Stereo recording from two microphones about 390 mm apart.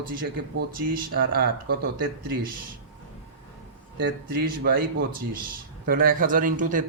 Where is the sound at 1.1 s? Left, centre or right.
Right.